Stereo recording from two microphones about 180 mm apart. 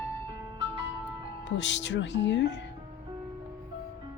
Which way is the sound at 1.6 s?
80° left.